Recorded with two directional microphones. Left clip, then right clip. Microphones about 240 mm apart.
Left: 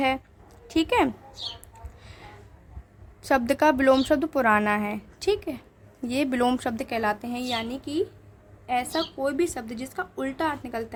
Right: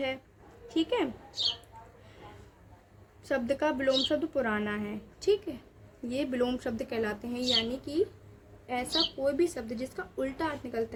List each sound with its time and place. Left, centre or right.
0.7 s a woman's voice: left
3.2 s a woman's voice: left